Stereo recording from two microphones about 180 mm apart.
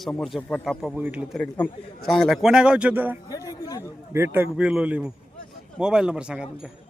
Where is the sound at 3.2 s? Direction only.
20° left (ahead or behind).